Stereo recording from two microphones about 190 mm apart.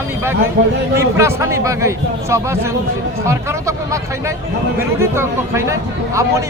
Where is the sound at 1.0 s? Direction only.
15° right (ahead or behind).